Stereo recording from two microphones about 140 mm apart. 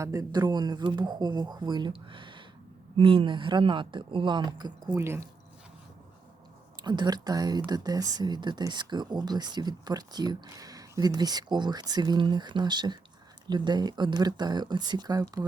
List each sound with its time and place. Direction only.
0.0 s speech: 25° right (ahead or behind)
6.8 s speech: 30° right (ahead or behind)